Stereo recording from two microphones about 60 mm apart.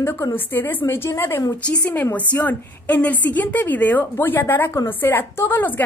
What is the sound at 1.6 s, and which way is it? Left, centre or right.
Speech, left.